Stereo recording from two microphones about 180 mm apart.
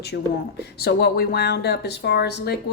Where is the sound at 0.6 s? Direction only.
65° left (ahead or behind).